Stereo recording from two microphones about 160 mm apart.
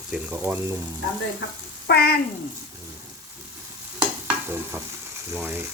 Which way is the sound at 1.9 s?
80° left.